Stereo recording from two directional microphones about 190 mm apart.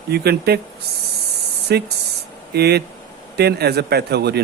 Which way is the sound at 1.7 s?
60° right (ahead or behind).